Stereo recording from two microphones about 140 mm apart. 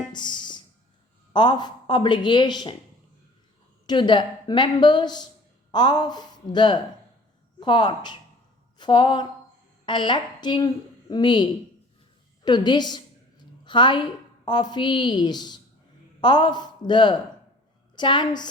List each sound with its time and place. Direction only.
0.1 s music: 30° left (ahead or behind)
1.3 s a woman's voice: 30° left (ahead or behind)
3.8 s a woman's voice: 30° left (ahead or behind)